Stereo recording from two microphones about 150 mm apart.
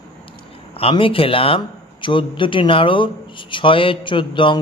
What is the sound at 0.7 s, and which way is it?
A man's voice, 40° left (ahead or behind).